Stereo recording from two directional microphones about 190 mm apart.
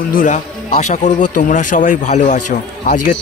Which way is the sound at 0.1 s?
40° left (ahead or behind).